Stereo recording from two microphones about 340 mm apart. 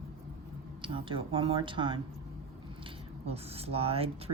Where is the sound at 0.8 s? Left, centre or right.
Centre.